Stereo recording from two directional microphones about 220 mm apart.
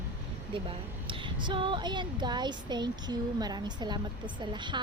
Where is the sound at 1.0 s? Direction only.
20° right (ahead or behind).